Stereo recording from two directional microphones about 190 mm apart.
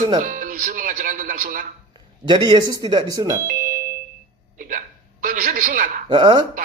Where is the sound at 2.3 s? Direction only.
25° right (ahead or behind).